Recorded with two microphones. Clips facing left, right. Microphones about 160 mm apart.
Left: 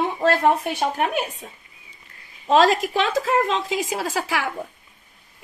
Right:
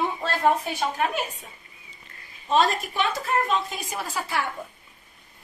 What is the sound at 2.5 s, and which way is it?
A woman's voice, 90° left.